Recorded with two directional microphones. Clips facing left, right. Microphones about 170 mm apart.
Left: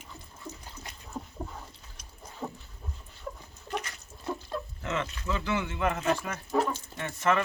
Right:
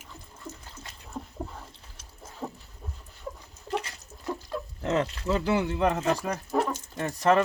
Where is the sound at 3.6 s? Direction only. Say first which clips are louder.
Right 4 dB; 30° right (ahead or behind).